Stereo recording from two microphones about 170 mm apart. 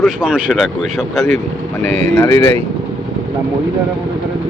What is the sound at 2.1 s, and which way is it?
Speech, 20° left (ahead or behind).